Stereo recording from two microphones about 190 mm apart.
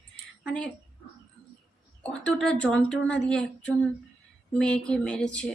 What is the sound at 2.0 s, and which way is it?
A woman's voice, 5° left (ahead or behind).